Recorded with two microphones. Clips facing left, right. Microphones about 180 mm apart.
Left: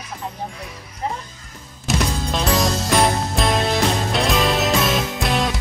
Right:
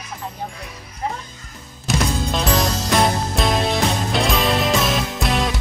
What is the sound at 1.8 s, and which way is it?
Music, centre (ahead or behind).